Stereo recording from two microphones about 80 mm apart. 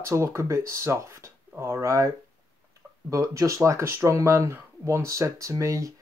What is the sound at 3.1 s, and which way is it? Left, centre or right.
Speech, right.